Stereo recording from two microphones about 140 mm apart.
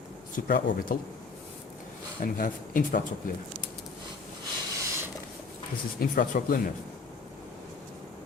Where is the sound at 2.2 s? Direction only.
85° left.